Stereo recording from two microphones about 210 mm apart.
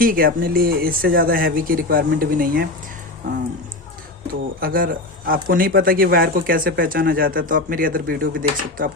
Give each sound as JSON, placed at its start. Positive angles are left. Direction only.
{"t": 0.0, "sound": "speech", "side_deg": -40}
{"t": 4.6, "sound": "speech", "side_deg": -45}